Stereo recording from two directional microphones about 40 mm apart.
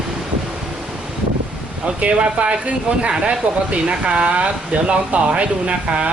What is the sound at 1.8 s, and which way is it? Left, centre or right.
Speech, right.